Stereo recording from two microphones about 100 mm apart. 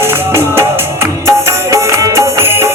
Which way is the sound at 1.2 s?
30° right (ahead or behind).